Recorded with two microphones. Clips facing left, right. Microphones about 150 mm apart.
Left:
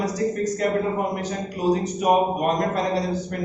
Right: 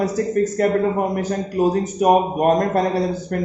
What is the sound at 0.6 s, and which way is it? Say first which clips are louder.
A man's voice: right 3 dB; 50° right (ahead or behind).